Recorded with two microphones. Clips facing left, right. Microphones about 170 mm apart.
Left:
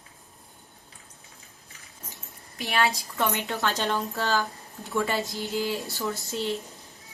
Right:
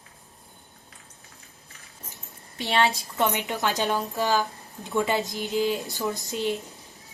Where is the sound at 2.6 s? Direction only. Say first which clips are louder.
Right 2 dB; 25° right (ahead or behind).